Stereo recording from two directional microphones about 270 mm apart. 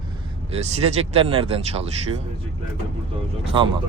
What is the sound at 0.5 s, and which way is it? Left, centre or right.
Speech, right.